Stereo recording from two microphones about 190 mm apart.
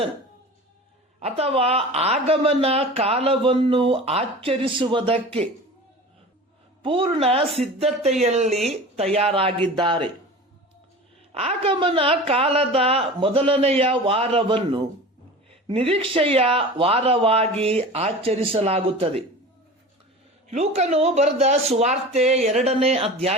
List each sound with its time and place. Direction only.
1.2 s speech: 30° right (ahead or behind)
6.8 s a woman's voice: 30° right (ahead or behind)
7.4 s speech: centre (ahead or behind)
8.2 s a woman's voice: 35° right (ahead or behind)
11.3 s a woman's voice: 30° right (ahead or behind)
20.5 s speech: 35° right (ahead or behind)